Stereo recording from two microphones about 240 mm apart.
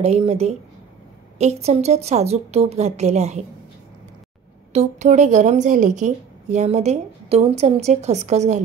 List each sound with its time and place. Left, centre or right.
0.0 s a woman's voice: right
4.7 s a woman's voice: right